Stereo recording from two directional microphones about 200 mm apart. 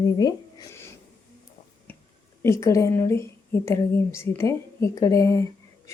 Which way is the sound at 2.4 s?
15° left (ahead or behind).